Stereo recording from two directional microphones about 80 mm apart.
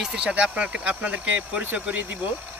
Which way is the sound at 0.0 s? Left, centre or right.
Centre.